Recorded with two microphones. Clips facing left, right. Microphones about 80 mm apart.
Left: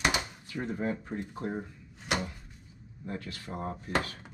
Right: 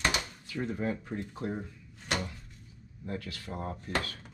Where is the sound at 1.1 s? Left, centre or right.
Centre.